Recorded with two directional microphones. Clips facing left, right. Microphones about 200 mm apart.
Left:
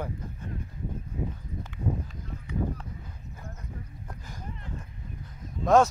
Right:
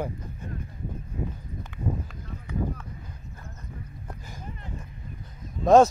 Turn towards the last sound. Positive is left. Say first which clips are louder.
# right 4 dB
turn(degrees=-40)  # may be behind; listen again after turning